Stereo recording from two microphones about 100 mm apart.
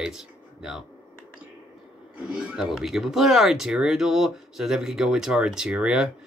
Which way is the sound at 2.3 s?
10° right (ahead or behind).